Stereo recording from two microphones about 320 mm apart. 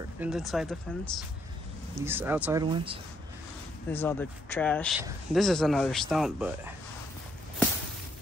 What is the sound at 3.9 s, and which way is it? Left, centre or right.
Speech, centre.